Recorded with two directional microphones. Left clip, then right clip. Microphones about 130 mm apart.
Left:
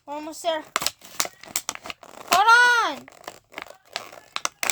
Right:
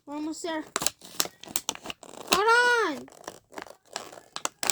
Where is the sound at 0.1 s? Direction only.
90° left.